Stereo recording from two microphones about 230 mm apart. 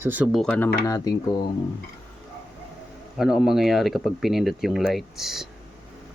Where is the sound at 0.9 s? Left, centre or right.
Centre.